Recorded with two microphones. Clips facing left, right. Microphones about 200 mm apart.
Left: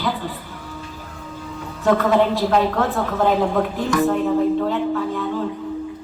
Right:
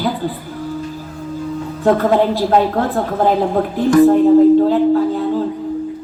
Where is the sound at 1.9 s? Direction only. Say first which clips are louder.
Right 3 dB; 35° right (ahead or behind).